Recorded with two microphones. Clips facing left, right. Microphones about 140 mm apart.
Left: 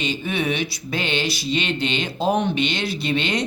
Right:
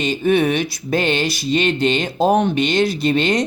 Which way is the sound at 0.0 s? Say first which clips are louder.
Right 8 dB; 50° right (ahead or behind).